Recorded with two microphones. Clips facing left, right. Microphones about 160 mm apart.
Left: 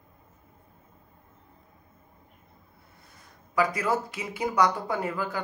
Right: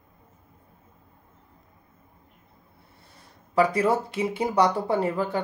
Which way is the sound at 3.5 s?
30° right (ahead or behind).